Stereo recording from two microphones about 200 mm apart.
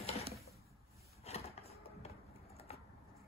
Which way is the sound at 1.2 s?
30° left (ahead or behind).